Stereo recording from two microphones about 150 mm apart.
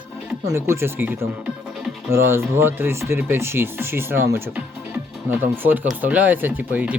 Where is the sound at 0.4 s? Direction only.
15° right (ahead or behind).